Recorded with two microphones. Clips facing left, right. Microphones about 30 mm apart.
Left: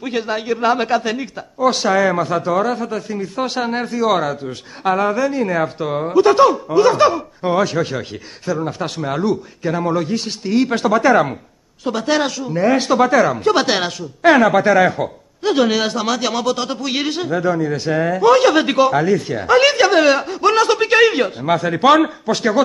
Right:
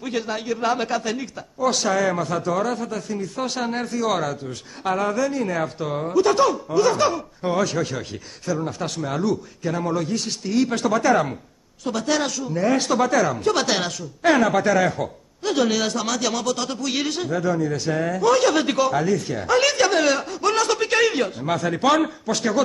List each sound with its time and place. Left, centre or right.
0.0 s a man's voice: left